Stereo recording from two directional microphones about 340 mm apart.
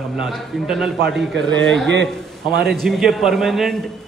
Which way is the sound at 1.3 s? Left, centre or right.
Right.